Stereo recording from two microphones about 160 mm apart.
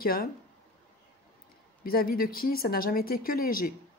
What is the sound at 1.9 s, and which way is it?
Speech, 65° left (ahead or behind).